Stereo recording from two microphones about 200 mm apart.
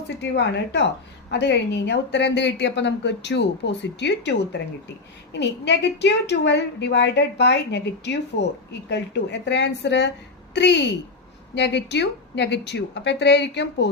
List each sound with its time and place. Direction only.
0.2 s a woman's voice: 60° left (ahead or behind)